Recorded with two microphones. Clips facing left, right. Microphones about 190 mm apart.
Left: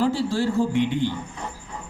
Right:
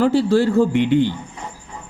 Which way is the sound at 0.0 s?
65° right (ahead or behind).